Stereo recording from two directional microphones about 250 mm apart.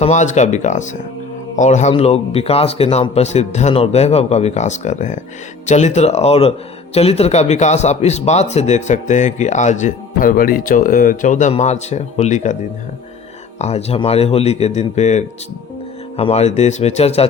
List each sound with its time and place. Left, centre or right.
0.0 s a man's voice: left
13.6 s a man's voice: left